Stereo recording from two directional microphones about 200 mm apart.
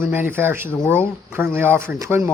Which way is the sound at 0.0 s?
10° right (ahead or behind).